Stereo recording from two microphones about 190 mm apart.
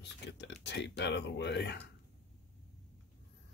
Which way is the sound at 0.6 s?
65° left (ahead or behind).